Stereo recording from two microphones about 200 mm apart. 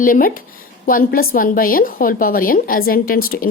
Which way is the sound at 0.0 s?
45° left (ahead or behind).